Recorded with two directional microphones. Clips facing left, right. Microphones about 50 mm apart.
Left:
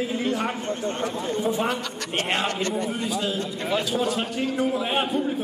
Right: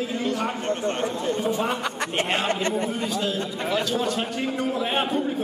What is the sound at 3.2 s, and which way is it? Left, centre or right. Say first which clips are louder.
A man's voice: right 1 dB; centre.